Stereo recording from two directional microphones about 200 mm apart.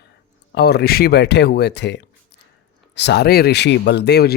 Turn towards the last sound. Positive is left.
turn(degrees=55)  # may be behind; listen again after turning